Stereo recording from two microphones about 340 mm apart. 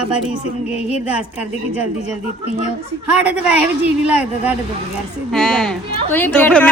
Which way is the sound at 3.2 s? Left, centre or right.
Centre.